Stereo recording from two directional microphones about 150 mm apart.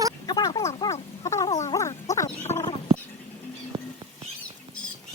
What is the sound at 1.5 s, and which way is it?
Dog, 50° left (ahead or behind).